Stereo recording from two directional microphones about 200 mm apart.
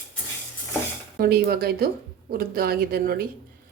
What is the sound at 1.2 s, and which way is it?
Speech, 50° right (ahead or behind).